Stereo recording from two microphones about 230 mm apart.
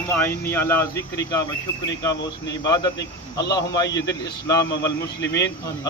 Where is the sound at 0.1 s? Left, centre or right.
Centre.